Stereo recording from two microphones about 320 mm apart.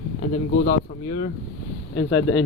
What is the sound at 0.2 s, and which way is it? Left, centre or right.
Speech, left.